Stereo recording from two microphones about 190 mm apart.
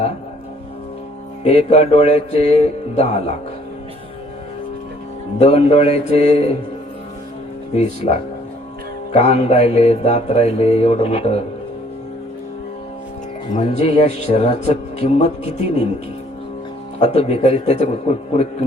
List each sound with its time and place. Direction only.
1.5 s mantra: 35° left (ahead or behind)
5.4 s mantra: 30° left (ahead or behind)
7.8 s mantra: 35° left (ahead or behind)
13.6 s mantra: 35° left (ahead or behind)
17.0 s mantra: 35° left (ahead or behind)